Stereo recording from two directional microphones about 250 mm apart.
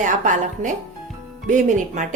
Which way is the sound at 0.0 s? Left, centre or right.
Right.